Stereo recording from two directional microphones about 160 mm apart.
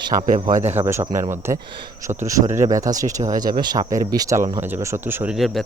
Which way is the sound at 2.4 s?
50° right (ahead or behind).